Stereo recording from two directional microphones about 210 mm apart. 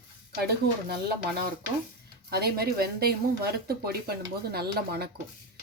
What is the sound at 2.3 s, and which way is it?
Speech, 50° right (ahead or behind).